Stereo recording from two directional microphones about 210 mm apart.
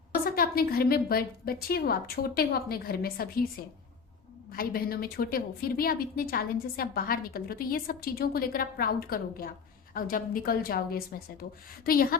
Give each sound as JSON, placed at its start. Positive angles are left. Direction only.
{"t": 0.3, "sound": "a woman's voice", "side_deg": 45}
{"t": 4.5, "sound": "a woman's voice", "side_deg": 45}